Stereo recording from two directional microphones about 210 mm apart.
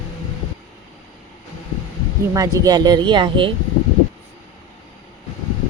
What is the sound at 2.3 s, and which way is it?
Speech, 15° right (ahead or behind).